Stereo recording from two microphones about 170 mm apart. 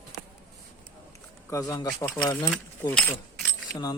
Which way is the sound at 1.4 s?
20° left (ahead or behind).